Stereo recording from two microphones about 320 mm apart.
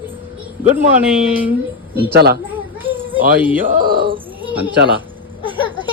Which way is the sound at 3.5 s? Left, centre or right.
Right.